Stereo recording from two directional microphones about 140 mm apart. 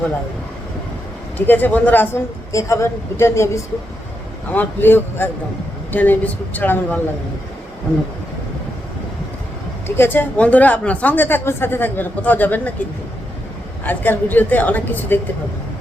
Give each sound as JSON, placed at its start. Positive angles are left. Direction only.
{"t": 1.4, "sound": "speech", "side_deg": 15}
{"t": 9.8, "sound": "speech", "side_deg": 15}
{"t": 13.8, "sound": "speech", "side_deg": 15}